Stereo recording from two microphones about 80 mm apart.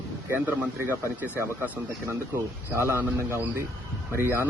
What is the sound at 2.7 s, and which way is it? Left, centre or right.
Speech, right.